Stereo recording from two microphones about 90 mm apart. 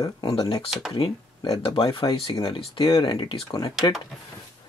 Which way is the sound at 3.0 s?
65° left (ahead or behind).